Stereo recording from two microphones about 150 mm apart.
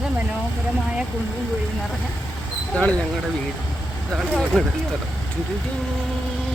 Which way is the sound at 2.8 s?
10° left (ahead or behind).